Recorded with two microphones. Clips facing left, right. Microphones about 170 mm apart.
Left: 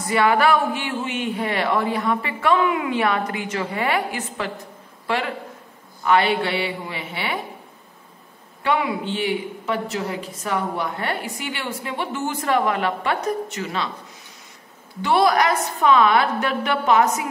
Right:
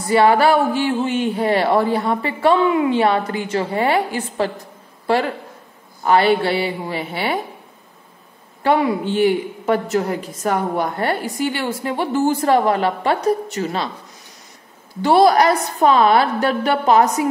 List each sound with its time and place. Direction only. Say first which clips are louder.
0.1 s a woman's voice: right 4 dB; 30° right (ahead or behind)
8.6 s a woman's voice: right 5 dB; 40° right (ahead or behind)
15.0 s a woman's voice: right 5 dB; 35° right (ahead or behind)